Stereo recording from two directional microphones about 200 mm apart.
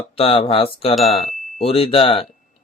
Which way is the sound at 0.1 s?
30° left (ahead or behind).